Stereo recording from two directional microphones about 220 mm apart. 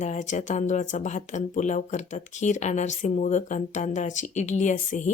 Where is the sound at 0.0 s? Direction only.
35° left (ahead or behind).